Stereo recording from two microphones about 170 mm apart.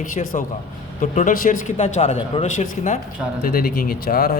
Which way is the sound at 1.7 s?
35° left (ahead or behind).